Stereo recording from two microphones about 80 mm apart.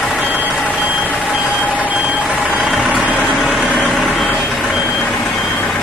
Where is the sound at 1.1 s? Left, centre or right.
Centre.